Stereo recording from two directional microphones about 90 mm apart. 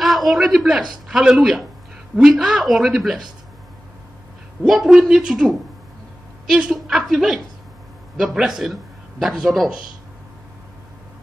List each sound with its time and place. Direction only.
0.0 s a man's voice: centre (ahead or behind)
4.6 s a woman's voice: 5° right (ahead or behind)